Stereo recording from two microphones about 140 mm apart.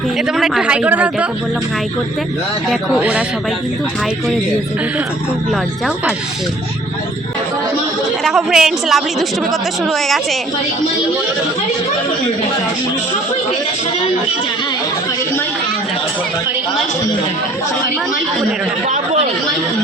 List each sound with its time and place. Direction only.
0.3 s a man's voice: centre (ahead or behind)
2.6 s a man's voice: 5° right (ahead or behind)
8.2 s a woman's voice: centre (ahead or behind)